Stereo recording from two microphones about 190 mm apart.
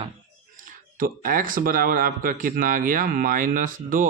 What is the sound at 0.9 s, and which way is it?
Speech, 45° right (ahead or behind).